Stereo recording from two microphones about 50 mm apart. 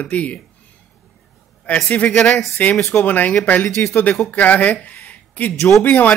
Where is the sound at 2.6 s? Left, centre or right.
Left.